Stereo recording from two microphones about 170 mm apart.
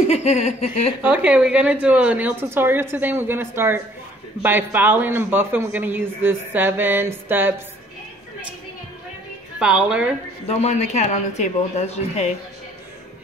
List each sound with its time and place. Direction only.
0.1 s speech: 40° left (ahead or behind)
1.0 s a man's voice: 10° right (ahead or behind)
9.6 s a woman's voice: 5° right (ahead or behind)
10.4 s speech: 40° left (ahead or behind)